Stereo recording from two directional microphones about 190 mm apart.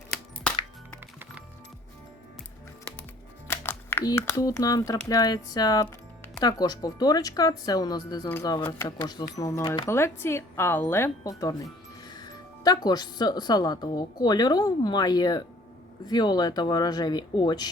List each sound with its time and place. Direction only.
0.1 s music: 5° left (ahead or behind)
3.5 s speech: 10° left (ahead or behind)